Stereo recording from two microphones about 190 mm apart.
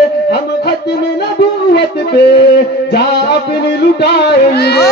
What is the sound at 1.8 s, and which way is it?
A man's voice, 60° left (ahead or behind).